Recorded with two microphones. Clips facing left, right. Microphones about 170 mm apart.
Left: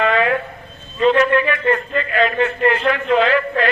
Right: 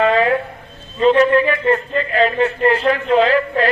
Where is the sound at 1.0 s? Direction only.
30° right (ahead or behind).